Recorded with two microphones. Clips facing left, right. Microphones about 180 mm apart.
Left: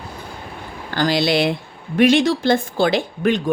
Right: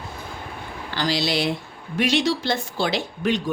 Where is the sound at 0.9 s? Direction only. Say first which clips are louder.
Left 6 dB; 50° left (ahead or behind).